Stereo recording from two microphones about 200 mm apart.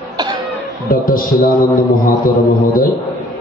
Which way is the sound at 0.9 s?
45° left (ahead or behind).